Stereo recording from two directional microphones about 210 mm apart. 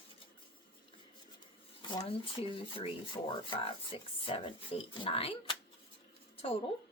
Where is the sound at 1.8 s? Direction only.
20° left (ahead or behind).